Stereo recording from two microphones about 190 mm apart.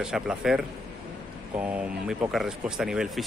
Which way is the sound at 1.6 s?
5° right (ahead or behind).